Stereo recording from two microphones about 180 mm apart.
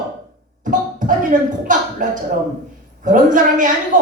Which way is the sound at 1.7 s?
45° right (ahead or behind).